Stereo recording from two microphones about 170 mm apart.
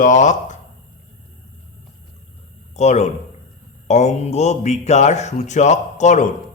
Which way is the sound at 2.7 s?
40° left (ahead or behind).